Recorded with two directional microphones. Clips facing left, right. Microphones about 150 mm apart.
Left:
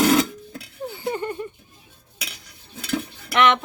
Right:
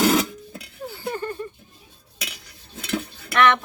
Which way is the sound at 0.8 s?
20° left (ahead or behind).